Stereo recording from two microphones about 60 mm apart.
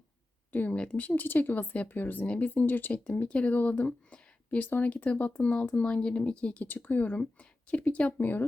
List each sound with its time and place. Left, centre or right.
0.5 s speech: left
6.8 s speech: left